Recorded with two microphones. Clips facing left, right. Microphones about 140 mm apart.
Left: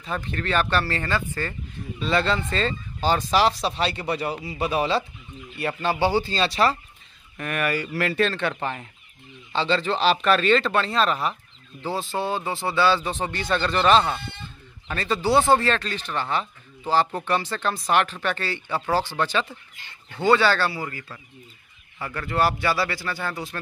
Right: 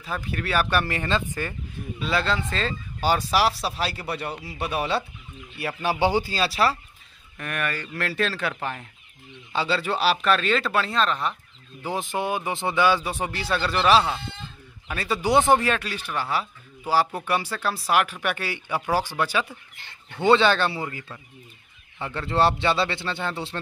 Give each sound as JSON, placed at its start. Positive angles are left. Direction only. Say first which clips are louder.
{"t": 0.0, "sound": "speech", "louder": "left 1 dB", "side_deg": -5}
{"t": 2.0, "sound": "speech", "louder": "left 2 dB", "side_deg": -5}
{"t": 5.8, "sound": "speech", "louder": "even", "side_deg": -15}
{"t": 11.8, "sound": "speech", "louder": "even", "side_deg": -15}
{"t": 20.2, "sound": "speech", "louder": "right 1 dB", "side_deg": -20}